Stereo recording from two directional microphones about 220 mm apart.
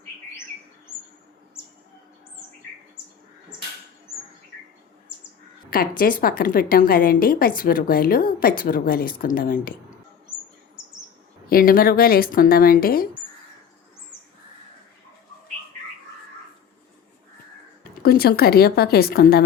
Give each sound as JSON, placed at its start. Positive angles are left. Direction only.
{"t": 6.0, "sound": "a woman's voice", "side_deg": 40}
{"t": 11.4, "sound": "a woman's voice", "side_deg": 40}
{"t": 18.0, "sound": "a woman's voice", "side_deg": 45}